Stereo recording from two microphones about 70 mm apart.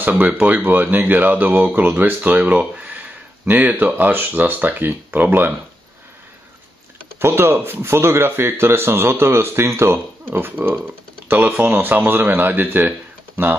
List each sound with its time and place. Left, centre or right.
0.0 s speech: right
7.2 s speech: right